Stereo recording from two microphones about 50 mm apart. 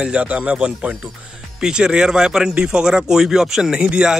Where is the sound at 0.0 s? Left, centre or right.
Right.